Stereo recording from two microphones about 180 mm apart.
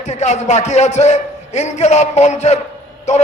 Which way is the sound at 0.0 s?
40° left (ahead or behind).